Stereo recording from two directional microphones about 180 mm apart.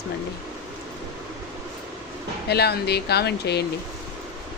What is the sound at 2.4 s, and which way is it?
Speech, 65° left (ahead or behind).